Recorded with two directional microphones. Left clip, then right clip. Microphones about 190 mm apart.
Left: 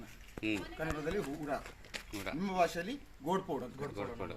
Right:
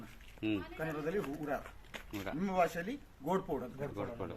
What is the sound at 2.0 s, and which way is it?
Speech, 55° right (ahead or behind).